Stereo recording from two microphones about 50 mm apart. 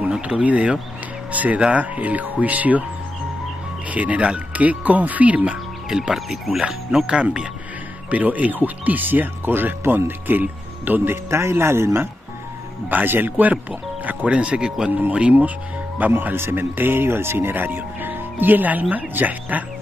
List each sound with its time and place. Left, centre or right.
0.4 s speech: right
3.9 s speech: right
5.9 s speech: centre
6.1 s speech: centre
7.1 s speech: centre
8.1 s speech: right
11.2 s speech: right
12.9 s speech: right
14.3 s speech: centre
14.9 s speech: right
16.3 s speech: right